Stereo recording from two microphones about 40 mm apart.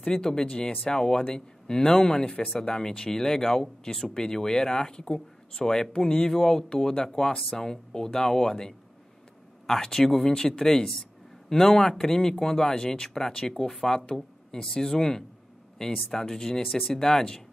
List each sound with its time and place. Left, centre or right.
0.0 s speech: centre